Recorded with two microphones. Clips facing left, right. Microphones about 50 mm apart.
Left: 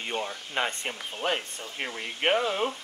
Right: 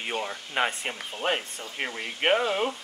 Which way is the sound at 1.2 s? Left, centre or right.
Right.